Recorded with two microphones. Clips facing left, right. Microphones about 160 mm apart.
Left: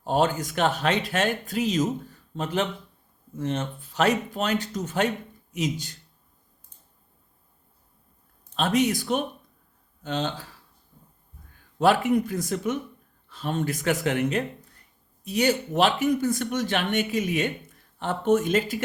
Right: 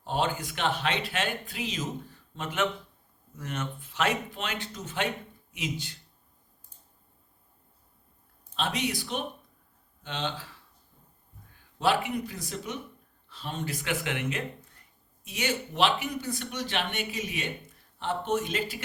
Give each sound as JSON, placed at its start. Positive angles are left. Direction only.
{"t": 0.0, "sound": "speech", "side_deg": 45}
{"t": 8.5, "sound": "speech", "side_deg": 45}
{"t": 11.8, "sound": "speech", "side_deg": 45}